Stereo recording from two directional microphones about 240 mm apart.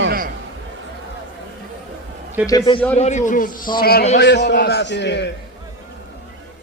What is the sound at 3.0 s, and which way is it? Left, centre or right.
A man's voice, left.